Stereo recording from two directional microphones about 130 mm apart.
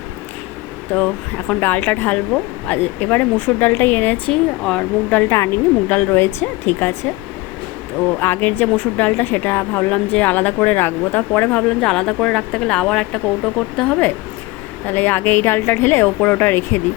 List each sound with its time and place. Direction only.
1.5 s a woman's voice: 10° left (ahead or behind)
8.2 s a woman's voice: 15° left (ahead or behind)